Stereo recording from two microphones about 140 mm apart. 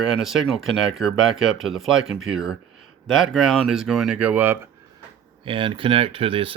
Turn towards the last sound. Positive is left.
turn(degrees=-40)  # may be behind; listen again after turning